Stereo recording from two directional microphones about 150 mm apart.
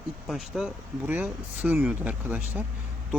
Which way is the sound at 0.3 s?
Centre (ahead or behind).